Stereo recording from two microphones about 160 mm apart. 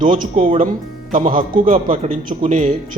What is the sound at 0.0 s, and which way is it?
A man's voice, 55° right (ahead or behind).